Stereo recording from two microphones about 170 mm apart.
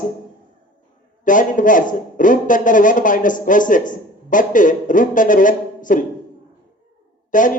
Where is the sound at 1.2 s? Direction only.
50° left (ahead or behind).